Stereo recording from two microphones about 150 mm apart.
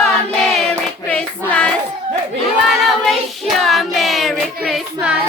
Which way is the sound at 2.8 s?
Centre (ahead or behind).